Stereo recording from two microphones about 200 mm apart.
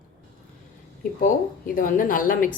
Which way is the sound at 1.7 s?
45° left (ahead or behind).